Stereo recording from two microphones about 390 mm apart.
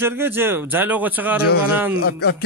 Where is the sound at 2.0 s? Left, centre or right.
Left.